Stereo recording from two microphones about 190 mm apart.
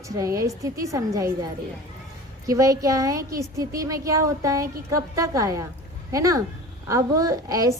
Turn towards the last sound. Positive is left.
turn(degrees=-20)  # may be behind; listen again after turning